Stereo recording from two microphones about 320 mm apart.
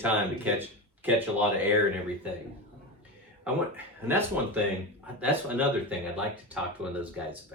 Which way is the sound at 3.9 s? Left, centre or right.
Centre.